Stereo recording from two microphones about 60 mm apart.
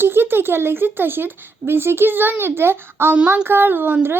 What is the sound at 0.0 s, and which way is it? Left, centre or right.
Speech, right.